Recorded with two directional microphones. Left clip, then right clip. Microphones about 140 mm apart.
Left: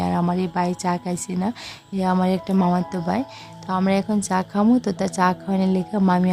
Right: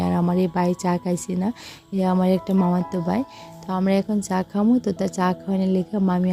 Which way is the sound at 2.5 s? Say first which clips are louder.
Left 1 dB; 10° right (ahead or behind).